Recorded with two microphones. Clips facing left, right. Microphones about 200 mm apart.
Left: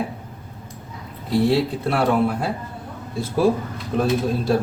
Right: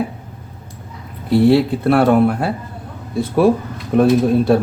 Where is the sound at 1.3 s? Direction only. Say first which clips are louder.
Right 6 dB; 60° right (ahead or behind).